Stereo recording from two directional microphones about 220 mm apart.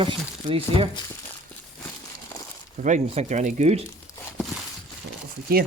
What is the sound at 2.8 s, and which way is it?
Speech, 30° right (ahead or behind).